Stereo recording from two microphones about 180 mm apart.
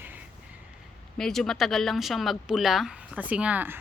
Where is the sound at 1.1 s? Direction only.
Centre (ahead or behind).